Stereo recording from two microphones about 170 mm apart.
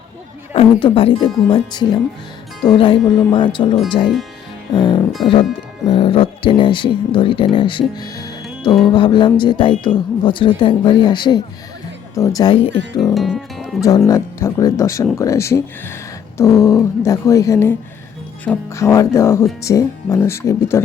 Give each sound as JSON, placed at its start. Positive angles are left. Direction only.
{"t": 0.5, "sound": "speech", "side_deg": 30}
{"t": 13.1, "sound": "music", "side_deg": 0}
{"t": 14.1, "sound": "speech", "side_deg": 15}